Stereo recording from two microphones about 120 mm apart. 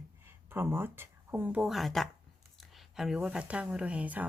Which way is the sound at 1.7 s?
Centre (ahead or behind).